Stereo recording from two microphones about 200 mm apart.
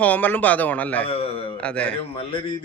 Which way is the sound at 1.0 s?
30° left (ahead or behind).